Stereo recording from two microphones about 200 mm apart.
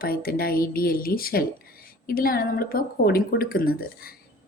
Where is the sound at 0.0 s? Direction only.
50° left (ahead or behind).